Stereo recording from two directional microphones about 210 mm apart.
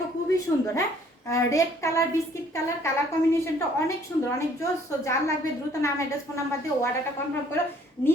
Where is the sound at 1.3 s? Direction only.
15° left (ahead or behind).